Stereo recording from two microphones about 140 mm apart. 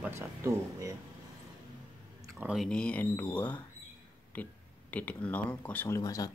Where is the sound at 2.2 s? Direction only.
20° right (ahead or behind).